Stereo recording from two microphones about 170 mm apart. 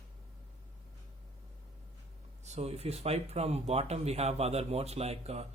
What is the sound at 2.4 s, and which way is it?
A man's voice, 40° right (ahead or behind).